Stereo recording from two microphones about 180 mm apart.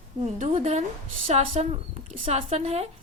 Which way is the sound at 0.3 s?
40° right (ahead or behind).